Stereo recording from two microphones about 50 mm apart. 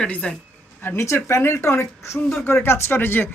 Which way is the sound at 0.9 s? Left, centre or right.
Left.